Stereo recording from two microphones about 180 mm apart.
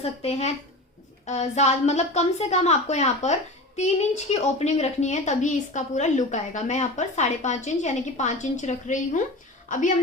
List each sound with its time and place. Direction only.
0.0 s a woman's voice: 35° left (ahead or behind)